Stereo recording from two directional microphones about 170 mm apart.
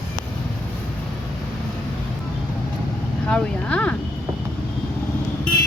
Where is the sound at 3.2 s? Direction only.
5° left (ahead or behind).